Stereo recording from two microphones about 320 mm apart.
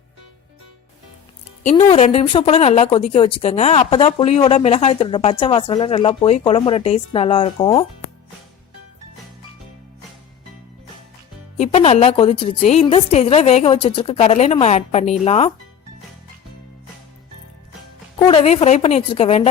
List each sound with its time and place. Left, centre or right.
1.6 s a woman's voice: centre
11.5 s a woman's voice: centre
18.2 s a woman's voice: centre